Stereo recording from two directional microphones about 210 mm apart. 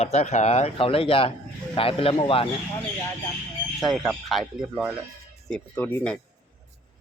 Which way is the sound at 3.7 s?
Centre (ahead or behind).